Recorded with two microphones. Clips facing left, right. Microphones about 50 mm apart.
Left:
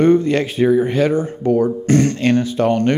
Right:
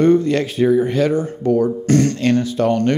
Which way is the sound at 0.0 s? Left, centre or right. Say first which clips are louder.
Left 1 dB; left.